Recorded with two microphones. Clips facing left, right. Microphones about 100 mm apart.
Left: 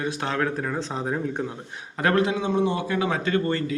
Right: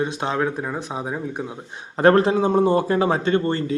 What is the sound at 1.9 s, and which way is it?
A man's voice, 35° right (ahead or behind).